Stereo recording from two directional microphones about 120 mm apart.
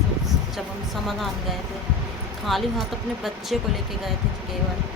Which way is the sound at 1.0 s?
Centre (ahead or behind).